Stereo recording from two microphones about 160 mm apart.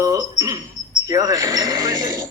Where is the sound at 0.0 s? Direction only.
20° right (ahead or behind).